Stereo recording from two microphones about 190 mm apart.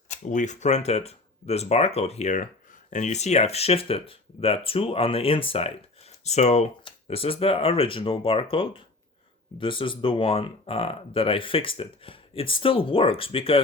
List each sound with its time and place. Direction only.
0.1 s speech: 40° left (ahead or behind)